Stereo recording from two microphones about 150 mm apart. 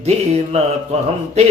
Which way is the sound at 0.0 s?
45° right (ahead or behind).